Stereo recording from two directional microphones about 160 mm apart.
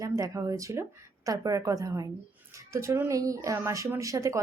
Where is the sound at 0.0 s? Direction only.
20° right (ahead or behind).